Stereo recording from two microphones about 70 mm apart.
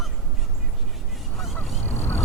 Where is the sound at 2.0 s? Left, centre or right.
Left.